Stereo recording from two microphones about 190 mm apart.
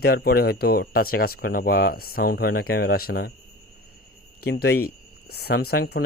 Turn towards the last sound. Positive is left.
turn(degrees=55)  # may be behind; listen again after turning